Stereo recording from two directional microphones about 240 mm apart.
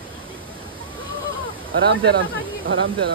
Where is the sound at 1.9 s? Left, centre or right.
Right.